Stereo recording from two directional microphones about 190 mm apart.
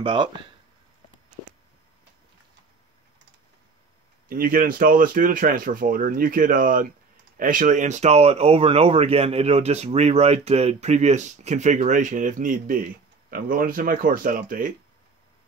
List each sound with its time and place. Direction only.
0.0 s speech: 25° right (ahead or behind)
4.3 s speech: 50° right (ahead or behind)